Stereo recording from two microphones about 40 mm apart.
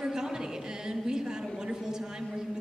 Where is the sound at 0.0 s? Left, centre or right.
Centre.